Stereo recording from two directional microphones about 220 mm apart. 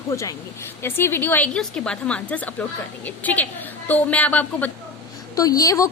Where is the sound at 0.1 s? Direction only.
15° left (ahead or behind).